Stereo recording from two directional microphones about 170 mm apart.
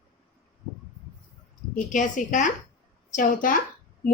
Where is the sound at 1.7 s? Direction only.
50° left (ahead or behind).